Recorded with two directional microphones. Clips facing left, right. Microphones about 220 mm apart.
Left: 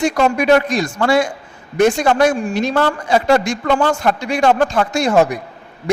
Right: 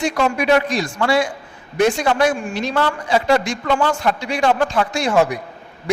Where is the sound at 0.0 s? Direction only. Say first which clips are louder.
Left 3 dB; 45° left (ahead or behind).